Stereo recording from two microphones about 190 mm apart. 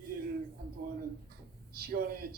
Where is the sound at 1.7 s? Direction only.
55° right (ahead or behind).